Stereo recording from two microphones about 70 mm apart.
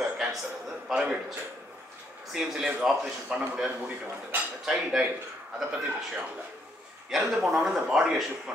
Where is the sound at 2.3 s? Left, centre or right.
Centre.